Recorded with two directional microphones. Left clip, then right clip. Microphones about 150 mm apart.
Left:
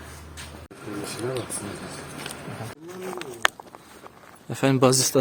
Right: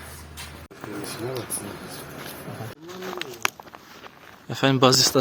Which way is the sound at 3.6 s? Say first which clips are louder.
Right 1 dB; centre (ahead or behind).